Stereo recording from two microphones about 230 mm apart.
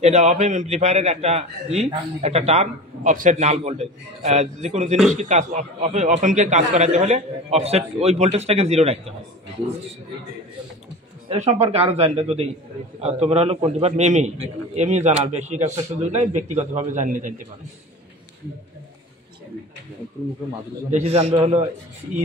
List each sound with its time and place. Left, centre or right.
0.0 s a man's voice: right
11.2 s a man's voice: right
20.9 s a man's voice: right